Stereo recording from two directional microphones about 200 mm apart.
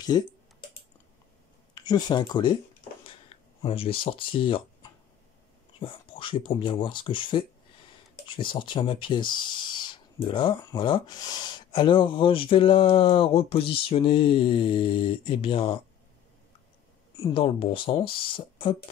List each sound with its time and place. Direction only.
0.1 s speech: 20° left (ahead or behind)
1.8 s speech: 20° left (ahead or behind)
5.8 s speech: 25° left (ahead or behind)
17.2 s speech: 25° left (ahead or behind)